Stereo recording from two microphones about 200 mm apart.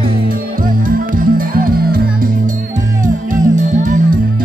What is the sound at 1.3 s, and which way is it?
Music, 45° right (ahead or behind).